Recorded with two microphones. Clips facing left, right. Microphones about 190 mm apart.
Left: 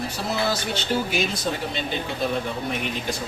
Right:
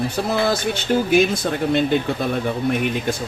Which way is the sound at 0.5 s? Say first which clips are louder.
Right 5 dB; 50° right (ahead or behind).